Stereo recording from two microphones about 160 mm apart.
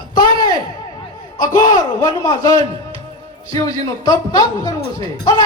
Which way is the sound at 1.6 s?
25° left (ahead or behind).